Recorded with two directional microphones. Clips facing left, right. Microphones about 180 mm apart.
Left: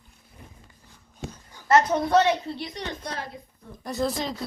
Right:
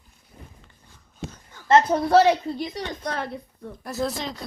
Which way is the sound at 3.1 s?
60° right (ahead or behind).